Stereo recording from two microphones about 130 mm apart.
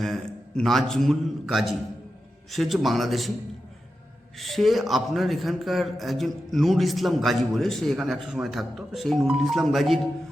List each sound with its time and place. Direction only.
0.0 s a man's voice: centre (ahead or behind)
4.4 s a man's voice: centre (ahead or behind)